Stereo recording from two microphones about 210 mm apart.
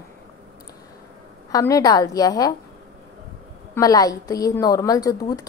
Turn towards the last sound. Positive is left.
turn(degrees=15)  # may be behind; listen again after turning